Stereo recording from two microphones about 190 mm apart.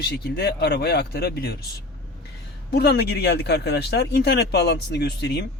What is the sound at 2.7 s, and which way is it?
Speech, 60° left (ahead or behind).